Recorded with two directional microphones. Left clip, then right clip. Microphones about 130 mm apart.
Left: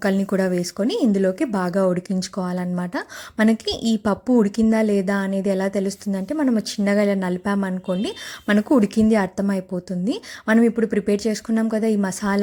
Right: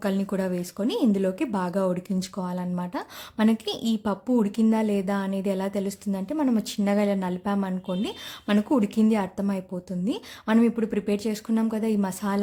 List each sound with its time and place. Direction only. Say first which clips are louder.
0.0 s a woman's voice: left 6 dB; 35° left (ahead or behind)